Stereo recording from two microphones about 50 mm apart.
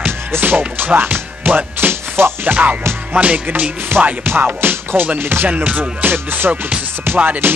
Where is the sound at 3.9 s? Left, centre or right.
Right.